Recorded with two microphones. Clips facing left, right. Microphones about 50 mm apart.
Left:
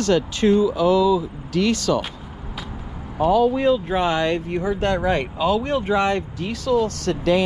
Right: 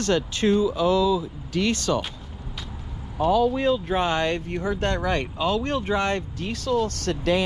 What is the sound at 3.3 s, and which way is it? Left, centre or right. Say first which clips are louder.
Speech: left 3 dB; left.